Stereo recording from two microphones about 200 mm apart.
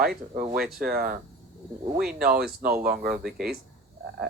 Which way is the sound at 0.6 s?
Centre (ahead or behind).